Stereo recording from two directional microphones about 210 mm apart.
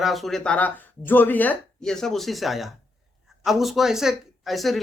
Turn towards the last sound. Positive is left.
turn(degrees=0)  # may be behind; listen again after turning